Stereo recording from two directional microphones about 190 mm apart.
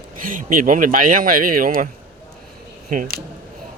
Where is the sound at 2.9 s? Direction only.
50° right (ahead or behind).